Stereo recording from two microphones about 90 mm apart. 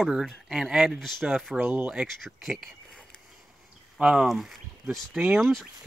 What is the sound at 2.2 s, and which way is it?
Speech, 5° right (ahead or behind).